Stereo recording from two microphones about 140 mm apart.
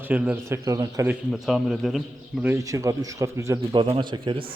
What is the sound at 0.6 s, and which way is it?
Speech, 25° right (ahead or behind).